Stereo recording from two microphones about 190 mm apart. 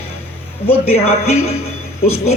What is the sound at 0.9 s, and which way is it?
Speech, 35° left (ahead or behind).